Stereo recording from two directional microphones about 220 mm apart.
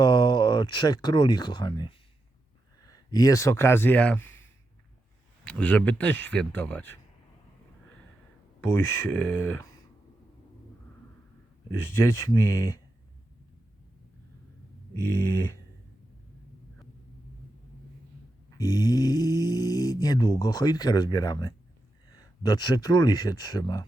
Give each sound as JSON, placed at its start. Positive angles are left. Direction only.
{"t": 0.0, "sound": "speech", "side_deg": 20}
{"t": 5.5, "sound": "speech", "side_deg": 5}
{"t": 8.6, "sound": "speech", "side_deg": 10}
{"t": 11.8, "sound": "speech", "side_deg": 10}
{"t": 14.9, "sound": "speech", "side_deg": 10}
{"t": 18.5, "sound": "speech", "side_deg": 15}